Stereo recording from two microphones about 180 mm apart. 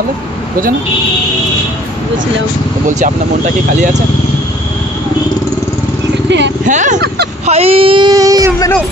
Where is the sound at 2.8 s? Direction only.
45° right (ahead or behind).